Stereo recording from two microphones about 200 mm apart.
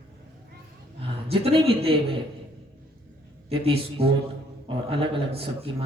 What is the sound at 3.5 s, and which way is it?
A man's voice, 25° right (ahead or behind).